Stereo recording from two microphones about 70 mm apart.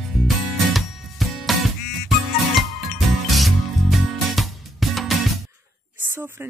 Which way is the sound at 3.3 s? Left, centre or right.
Centre.